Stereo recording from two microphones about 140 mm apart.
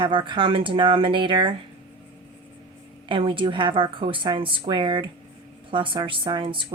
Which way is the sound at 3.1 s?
35° right (ahead or behind).